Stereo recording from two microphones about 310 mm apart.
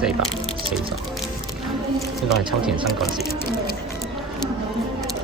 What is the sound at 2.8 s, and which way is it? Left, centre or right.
Speech, centre.